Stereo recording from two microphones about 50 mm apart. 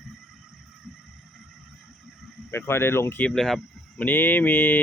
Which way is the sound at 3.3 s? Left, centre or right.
Centre.